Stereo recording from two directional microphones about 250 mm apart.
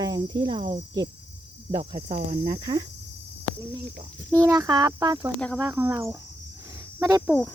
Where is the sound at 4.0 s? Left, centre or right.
Centre.